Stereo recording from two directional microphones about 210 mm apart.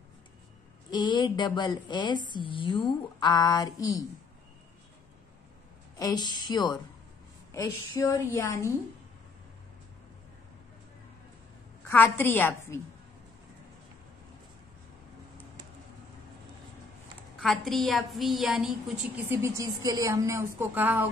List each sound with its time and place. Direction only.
0.8 s a woman's voice: 20° left (ahead or behind)
5.9 s a woman's voice: 20° left (ahead or behind)
11.9 s a woman's voice: 10° left (ahead or behind)
17.4 s a woman's voice: centre (ahead or behind)
19.2 s a woman's voice: 10° right (ahead or behind)